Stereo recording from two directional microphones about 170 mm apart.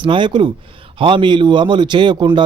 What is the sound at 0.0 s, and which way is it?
Speech, 30° right (ahead or behind).